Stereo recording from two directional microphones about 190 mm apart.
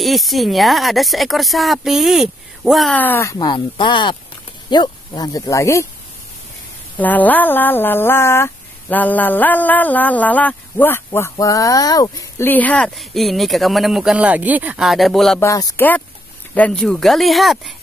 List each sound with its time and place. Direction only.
0.0 s speech: centre (ahead or behind); by 5.9 s 15° left (ahead or behind)
7.0 s speech: 10° left (ahead or behind)
15.4 s speech: 15° left (ahead or behind); by 17.7 s centre (ahead or behind)